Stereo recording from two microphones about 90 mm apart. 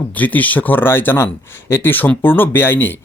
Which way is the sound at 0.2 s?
20° left (ahead or behind).